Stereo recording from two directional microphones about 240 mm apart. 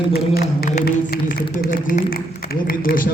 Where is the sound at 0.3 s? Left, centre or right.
Left.